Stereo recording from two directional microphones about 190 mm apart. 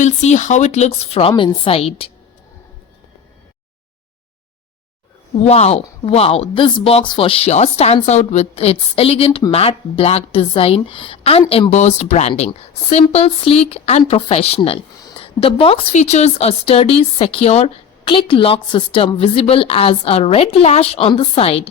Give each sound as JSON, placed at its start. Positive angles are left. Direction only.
{"t": 0.0, "sound": "speech", "side_deg": 40}
{"t": 5.5, "sound": "speech", "side_deg": 35}